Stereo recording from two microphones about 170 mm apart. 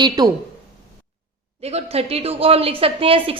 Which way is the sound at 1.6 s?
40° right (ahead or behind).